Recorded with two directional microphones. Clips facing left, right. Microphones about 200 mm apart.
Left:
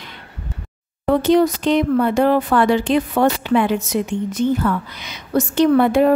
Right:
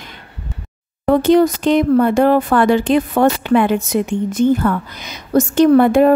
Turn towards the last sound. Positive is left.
turn(degrees=-45)  # may be behind; listen again after turning